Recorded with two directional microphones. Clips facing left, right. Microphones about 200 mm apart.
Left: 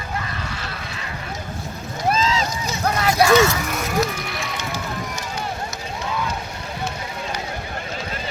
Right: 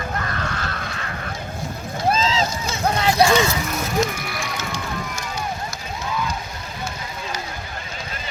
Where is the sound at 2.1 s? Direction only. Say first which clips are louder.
Even; 25° right (ahead or behind).